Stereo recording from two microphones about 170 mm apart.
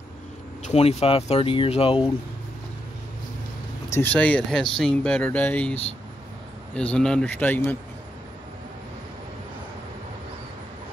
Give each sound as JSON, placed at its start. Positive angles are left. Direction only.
{"t": 0.7, "sound": "speech", "side_deg": 35}
{"t": 3.9, "sound": "speech", "side_deg": 10}